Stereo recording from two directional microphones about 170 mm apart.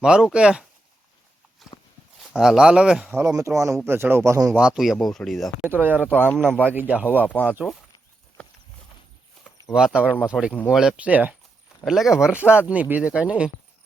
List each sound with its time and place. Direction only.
0.0 s speech: 5° right (ahead or behind)
1.7 s horse: 35° left (ahead or behind)
2.3 s speech: 5° right (ahead or behind)
4.5 s speech: 5° right (ahead or behind)
5.6 s speech: 10° right (ahead or behind)
9.7 s speech: 5° right (ahead or behind)